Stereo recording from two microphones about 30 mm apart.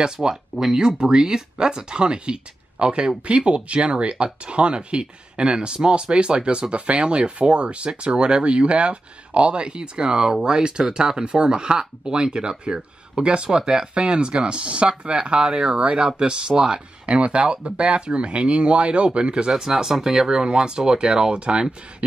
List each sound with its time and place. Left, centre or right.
0.0 s speech: right
19.5 s speech: centre; by 21.6 s right